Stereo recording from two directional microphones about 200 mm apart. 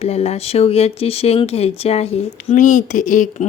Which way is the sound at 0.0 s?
30° left (ahead or behind).